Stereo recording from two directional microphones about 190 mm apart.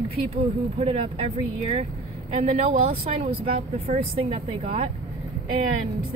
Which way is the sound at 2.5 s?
35° right (ahead or behind).